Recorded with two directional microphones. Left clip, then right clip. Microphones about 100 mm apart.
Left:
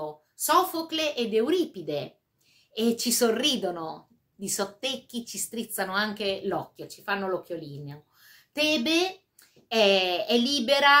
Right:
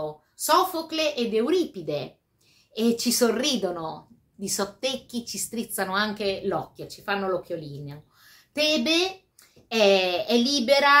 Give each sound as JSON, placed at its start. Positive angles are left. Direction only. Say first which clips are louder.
{"t": 0.0, "sound": "a woman's voice", "louder": "right 2 dB", "side_deg": 35}